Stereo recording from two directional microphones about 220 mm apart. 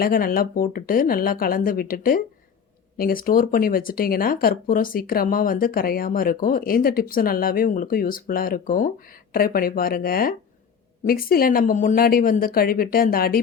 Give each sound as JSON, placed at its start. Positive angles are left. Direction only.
{"t": 0.0, "sound": "speech", "side_deg": 40}